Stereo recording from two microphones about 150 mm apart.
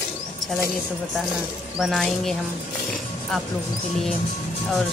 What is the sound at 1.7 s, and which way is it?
Speech, centre (ahead or behind).